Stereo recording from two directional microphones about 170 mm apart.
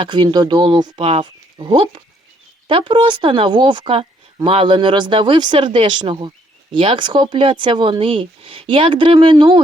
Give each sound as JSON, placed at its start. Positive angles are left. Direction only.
{"t": 0.0, "sound": "speech", "side_deg": -30}